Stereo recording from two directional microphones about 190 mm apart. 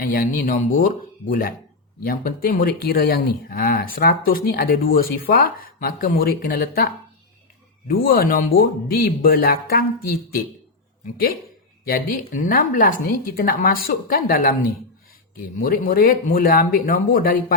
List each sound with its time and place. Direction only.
0.0 s speech: 50° left (ahead or behind)
11.0 s speech: 50° left (ahead or behind)
15.5 s speech: 50° left (ahead or behind)